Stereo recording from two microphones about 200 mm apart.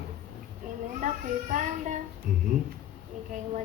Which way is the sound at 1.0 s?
40° right (ahead or behind).